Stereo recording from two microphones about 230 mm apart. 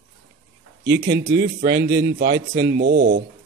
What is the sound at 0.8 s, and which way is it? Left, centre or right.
A man's voice, right.